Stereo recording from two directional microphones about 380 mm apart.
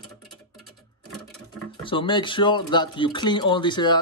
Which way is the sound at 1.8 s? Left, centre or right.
Centre.